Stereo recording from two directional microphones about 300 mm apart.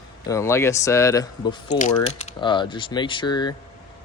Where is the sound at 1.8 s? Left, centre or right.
Left.